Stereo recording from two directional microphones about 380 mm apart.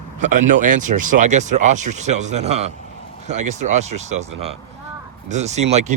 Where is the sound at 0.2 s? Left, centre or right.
Centre.